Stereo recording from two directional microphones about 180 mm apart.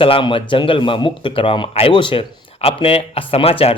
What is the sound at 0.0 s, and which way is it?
Speech, 30° left (ahead or behind).